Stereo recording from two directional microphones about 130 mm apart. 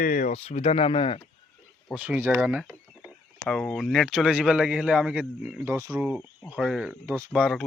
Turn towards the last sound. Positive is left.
turn(degrees=-5)  # may be behind; listen again after turning